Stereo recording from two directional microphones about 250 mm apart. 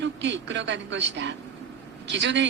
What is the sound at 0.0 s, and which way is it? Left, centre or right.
A woman's voice, right.